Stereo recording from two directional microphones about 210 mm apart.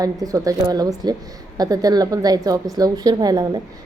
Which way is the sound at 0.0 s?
15° right (ahead or behind).